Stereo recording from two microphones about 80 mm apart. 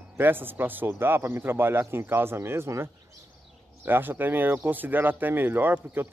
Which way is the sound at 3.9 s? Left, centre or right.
Right.